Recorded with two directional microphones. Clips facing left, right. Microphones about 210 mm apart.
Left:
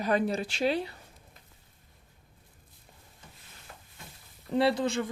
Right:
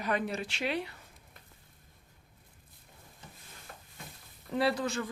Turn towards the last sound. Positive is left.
turn(degrees=25)  # may be behind; listen again after turning